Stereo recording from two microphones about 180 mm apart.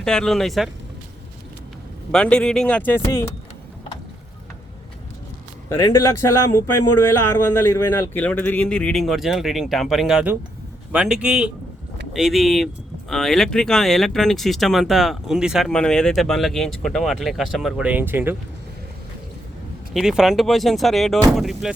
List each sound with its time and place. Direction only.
0.0 s speech: 5° left (ahead or behind)
2.1 s speech: 5° left (ahead or behind)
5.6 s speech: 20° left (ahead or behind); by 18.3 s 10° right (ahead or behind)
19.9 s speech: centre (ahead or behind)